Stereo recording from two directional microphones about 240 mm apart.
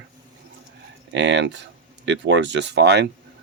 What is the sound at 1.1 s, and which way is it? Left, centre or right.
Speech, right.